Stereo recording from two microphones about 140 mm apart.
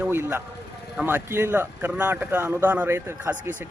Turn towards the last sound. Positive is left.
turn(degrees=-15)  # may be behind; listen again after turning